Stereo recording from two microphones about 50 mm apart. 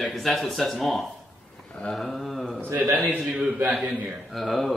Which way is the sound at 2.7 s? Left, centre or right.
Right.